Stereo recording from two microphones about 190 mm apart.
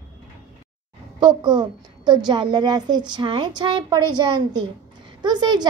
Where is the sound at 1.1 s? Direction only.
25° right (ahead or behind).